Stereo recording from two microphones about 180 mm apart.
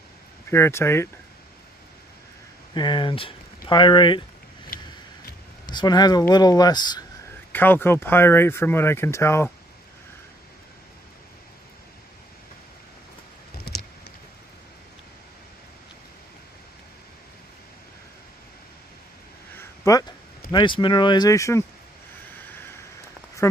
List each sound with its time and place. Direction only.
0.5 s speech: 15° left (ahead or behind)
2.7 s speech: 25° left (ahead or behind)
5.7 s speech: 25° left (ahead or behind)
7.5 s speech: 10° left (ahead or behind)
19.6 s a sound: 15° left (ahead or behind)
20.5 s speech: 25° left (ahead or behind)
23.4 s speech: 15° left (ahead or behind)